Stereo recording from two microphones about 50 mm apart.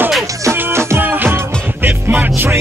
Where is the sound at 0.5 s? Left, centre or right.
Right.